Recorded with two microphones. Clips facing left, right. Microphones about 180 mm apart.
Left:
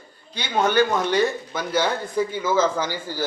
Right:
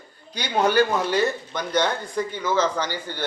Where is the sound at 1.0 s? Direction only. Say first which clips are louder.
Left 1 dB; centre (ahead or behind).